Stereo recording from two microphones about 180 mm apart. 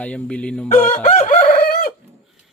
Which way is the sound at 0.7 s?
40° left (ahead or behind).